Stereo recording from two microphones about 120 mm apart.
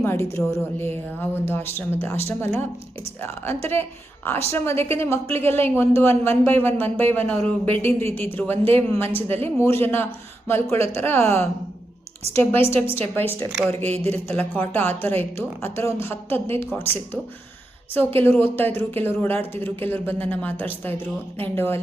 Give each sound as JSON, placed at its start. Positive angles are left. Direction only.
{"t": 0.0, "sound": "speech", "side_deg": 20}
{"t": 17.9, "sound": "speech", "side_deg": 15}